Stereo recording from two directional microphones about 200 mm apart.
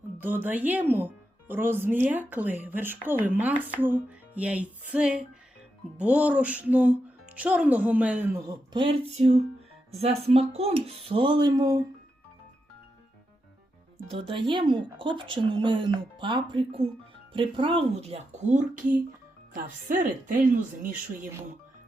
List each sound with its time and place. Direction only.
0.2 s speech: 10° right (ahead or behind)
8.7 s speech: 25° right (ahead or behind)
14.1 s speech: 25° right (ahead or behind); by 20.9 s 40° right (ahead or behind)